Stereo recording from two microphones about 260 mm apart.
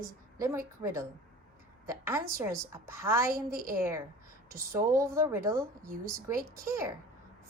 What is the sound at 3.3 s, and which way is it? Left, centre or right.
Speech, right.